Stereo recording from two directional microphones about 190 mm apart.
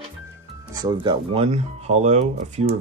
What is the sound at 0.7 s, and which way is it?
Speech, 20° right (ahead or behind).